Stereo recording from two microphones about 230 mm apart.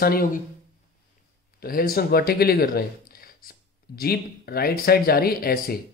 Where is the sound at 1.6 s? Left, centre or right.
Left.